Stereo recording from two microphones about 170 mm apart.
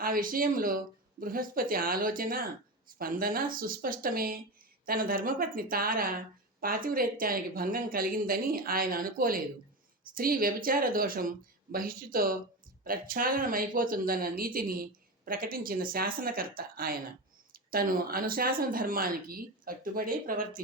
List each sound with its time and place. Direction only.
0.0 s speech: 55° right (ahead or behind)